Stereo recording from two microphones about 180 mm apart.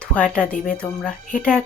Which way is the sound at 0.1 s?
5° left (ahead or behind).